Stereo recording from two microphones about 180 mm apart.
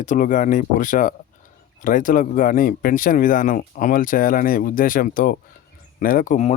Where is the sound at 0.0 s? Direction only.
45° left (ahead or behind).